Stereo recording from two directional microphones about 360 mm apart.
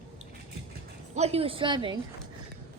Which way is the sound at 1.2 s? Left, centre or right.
Centre.